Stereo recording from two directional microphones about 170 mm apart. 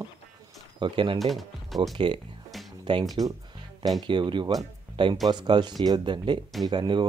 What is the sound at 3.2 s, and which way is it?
Speech, 20° right (ahead or behind).